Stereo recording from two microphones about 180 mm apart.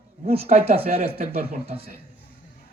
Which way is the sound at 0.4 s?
35° right (ahead or behind).